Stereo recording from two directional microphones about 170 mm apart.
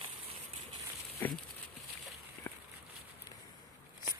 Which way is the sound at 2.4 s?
10° left (ahead or behind).